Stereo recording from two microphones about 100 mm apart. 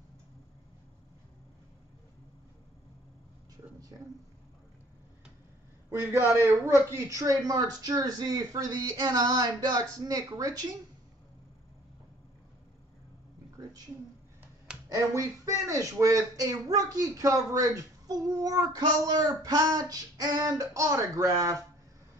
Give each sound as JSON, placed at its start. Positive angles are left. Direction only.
{"t": 3.9, "sound": "speech", "side_deg": -40}
{"t": 5.9, "sound": "a man's voice", "side_deg": -30}
{"t": 15.1, "sound": "speech", "side_deg": -35}